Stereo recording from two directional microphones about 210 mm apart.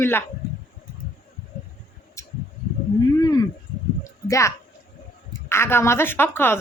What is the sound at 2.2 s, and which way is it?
Tick, 15° left (ahead or behind).